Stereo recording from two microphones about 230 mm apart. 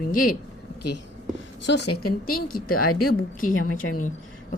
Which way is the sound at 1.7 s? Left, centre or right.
Left.